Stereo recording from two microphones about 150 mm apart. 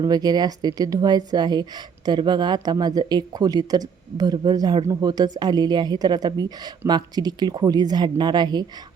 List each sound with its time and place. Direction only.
0.0 s speech: 25° right (ahead or behind)